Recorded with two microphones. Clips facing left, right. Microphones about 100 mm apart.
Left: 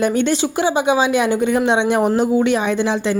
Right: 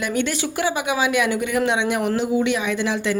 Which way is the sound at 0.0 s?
30° left (ahead or behind).